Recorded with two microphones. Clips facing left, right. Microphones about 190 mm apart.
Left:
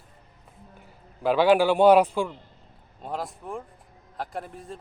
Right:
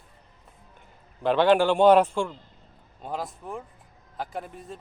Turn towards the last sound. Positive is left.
turn(degrees=0)  # may be behind; listen again after turning